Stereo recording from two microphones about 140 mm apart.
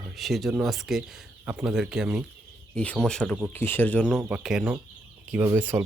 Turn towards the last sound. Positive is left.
turn(degrees=-15)  # may be behind; listen again after turning